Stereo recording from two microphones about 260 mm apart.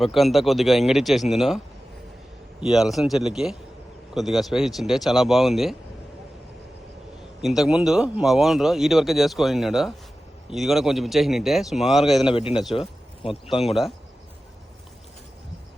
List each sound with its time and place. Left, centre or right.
0.0 s speech: centre
7.4 s speech: centre
12.3 s a man's voice: left
13.6 s speech: centre